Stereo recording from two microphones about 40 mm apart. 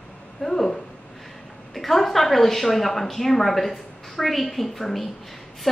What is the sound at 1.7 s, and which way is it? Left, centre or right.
A woman's voice, centre.